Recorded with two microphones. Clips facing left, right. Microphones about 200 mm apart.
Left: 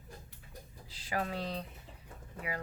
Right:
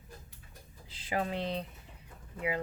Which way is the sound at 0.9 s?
20° right (ahead or behind).